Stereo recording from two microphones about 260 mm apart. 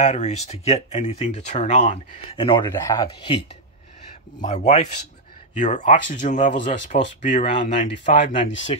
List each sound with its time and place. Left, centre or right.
0.0 s speech: left
4.4 s speech: left